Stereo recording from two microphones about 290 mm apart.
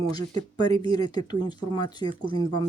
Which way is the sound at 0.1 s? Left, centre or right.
Centre.